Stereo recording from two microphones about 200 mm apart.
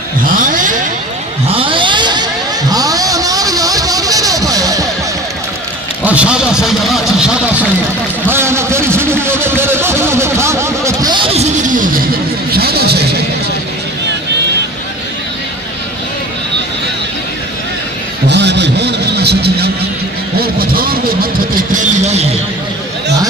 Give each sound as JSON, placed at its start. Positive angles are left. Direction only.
{"t": 0.4, "sound": "a sound", "side_deg": -40}
{"t": 1.5, "sound": "a sound", "side_deg": -25}
{"t": 2.7, "sound": "vehicle", "side_deg": -20}
{"t": 6.0, "sound": "speech", "side_deg": -5}
{"t": 18.3, "sound": "vehicle", "side_deg": -60}
{"t": 20.3, "sound": "speech", "side_deg": -50}
{"t": 21.7, "sound": "speech", "side_deg": -35}